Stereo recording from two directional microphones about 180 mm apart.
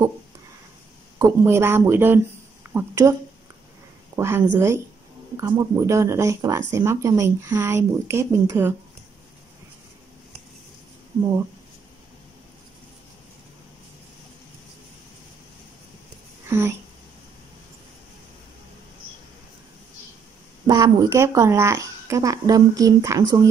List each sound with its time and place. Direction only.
1.2 s speech: 15° right (ahead or behind)
4.2 s a woman's voice: 15° right (ahead or behind)
16.4 s a sound: 15° right (ahead or behind)
20.6 s a woman's voice: 20° right (ahead or behind)